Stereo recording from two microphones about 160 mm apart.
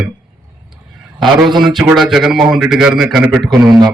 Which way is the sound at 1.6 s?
Centre (ahead or behind).